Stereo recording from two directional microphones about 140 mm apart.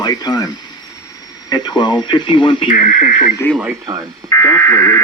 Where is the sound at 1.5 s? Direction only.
30° left (ahead or behind).